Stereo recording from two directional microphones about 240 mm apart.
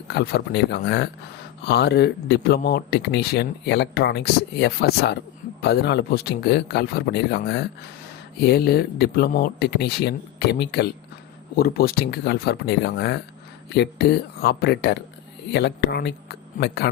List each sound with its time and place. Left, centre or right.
0.1 s speech: left